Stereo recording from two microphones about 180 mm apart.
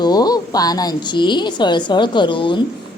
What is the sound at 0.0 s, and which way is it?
Speech, 20° left (ahead or behind).